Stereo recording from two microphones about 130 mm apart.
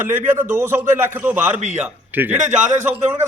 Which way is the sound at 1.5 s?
60° right (ahead or behind).